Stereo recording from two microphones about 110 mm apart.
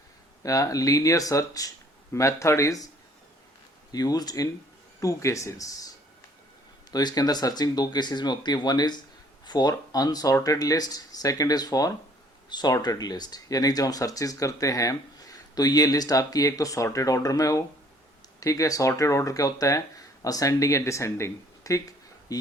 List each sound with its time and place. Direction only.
0.4 s speech: 30° left (ahead or behind)
3.9 s speech: 35° left (ahead or behind)
6.9 s speech: 35° left (ahead or behind)